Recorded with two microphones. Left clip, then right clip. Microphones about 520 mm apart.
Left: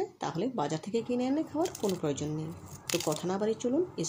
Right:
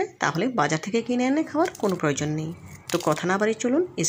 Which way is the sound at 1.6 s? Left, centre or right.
Centre.